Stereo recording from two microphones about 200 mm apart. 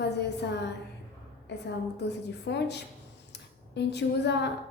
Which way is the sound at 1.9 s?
60° left (ahead or behind).